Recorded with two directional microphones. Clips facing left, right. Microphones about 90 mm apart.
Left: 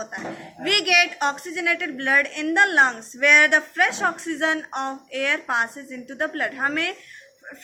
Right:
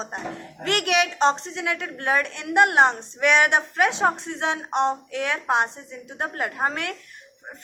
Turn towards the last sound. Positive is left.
turn(degrees=-20)  # may be behind; listen again after turning